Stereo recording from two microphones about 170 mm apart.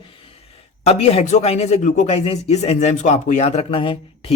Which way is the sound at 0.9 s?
35° left (ahead or behind).